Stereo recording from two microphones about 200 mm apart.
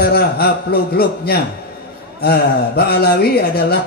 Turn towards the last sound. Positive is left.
turn(degrees=50)  # may be behind; listen again after turning